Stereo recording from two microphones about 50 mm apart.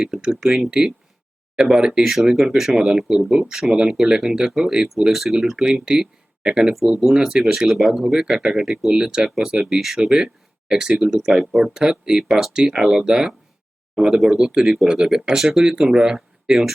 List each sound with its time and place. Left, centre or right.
0.0 s speech: centre
1.6 s speech: centre
9.6 s speech: centre